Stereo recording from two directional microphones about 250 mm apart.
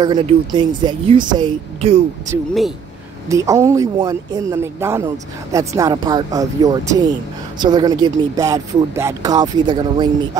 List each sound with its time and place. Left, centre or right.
0.0 s speech: centre
3.3 s speech: centre